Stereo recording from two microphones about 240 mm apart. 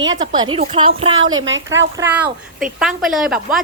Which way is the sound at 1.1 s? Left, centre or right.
Right.